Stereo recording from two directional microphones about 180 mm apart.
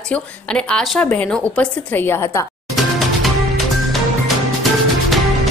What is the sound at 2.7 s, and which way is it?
Music, centre (ahead or behind).